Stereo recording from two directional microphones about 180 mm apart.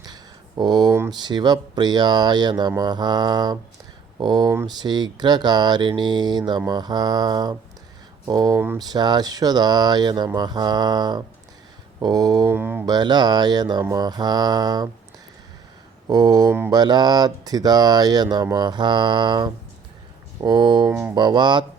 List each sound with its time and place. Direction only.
0.0 s speech: 20° right (ahead or behind)
12.8 s speech: 25° right (ahead or behind)
16.0 s speech: 20° right (ahead or behind)